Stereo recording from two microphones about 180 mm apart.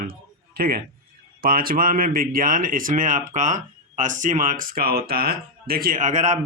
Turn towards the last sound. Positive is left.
turn(degrees=-40)  # may be behind; listen again after turning